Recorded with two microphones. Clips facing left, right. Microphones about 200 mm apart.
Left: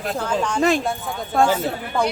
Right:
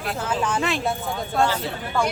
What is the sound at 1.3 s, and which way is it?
Speech, 50° left (ahead or behind).